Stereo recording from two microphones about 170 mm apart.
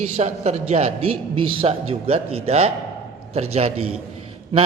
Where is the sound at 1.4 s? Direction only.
30° right (ahead or behind).